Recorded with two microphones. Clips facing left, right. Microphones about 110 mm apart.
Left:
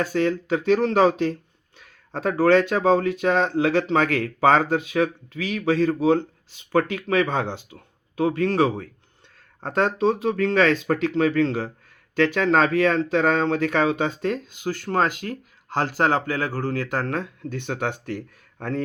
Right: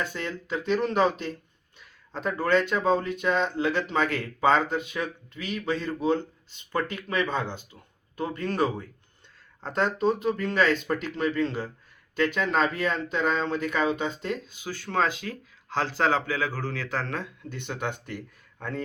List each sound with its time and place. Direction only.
0.1 s speech: 65° left (ahead or behind)
2.4 s speech: 70° left (ahead or behind)
8.1 s speech: 90° left
9.6 s speech: 60° left (ahead or behind)
14.3 s speech: 50° left (ahead or behind)